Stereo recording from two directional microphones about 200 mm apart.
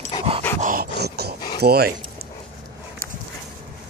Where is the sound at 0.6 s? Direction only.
45° right (ahead or behind).